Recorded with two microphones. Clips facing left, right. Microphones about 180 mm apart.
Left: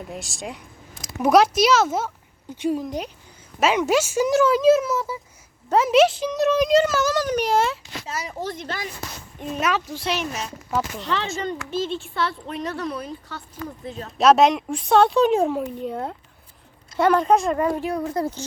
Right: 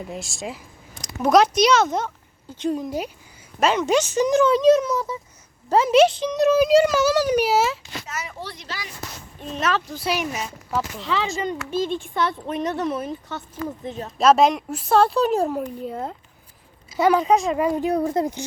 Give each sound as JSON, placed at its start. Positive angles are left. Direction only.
{"t": 0.1, "sound": "a child's voice", "side_deg": 0}
{"t": 8.0, "sound": "speech", "side_deg": 30}
{"t": 9.4, "sound": "speech", "side_deg": 10}
{"t": 10.0, "sound": "a child's voice", "side_deg": -10}
{"t": 14.2, "sound": "a child's voice", "side_deg": 0}
{"t": 17.6, "sound": "a woman's voice", "side_deg": -20}